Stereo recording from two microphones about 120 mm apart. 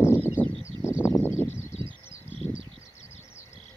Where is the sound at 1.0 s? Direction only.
25° left (ahead or behind).